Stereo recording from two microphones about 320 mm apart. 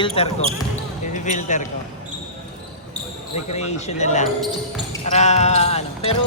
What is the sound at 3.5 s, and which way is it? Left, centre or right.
Music, left.